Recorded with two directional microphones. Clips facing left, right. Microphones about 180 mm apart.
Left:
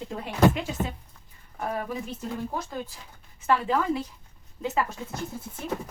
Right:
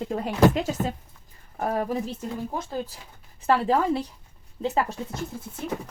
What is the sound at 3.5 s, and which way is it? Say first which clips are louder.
Speech: right 3 dB; 35° right (ahead or behind).